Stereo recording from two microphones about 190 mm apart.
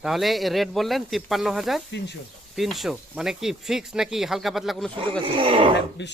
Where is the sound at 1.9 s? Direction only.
65° left (ahead or behind).